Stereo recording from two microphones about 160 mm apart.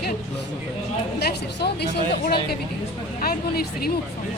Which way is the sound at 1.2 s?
90° left.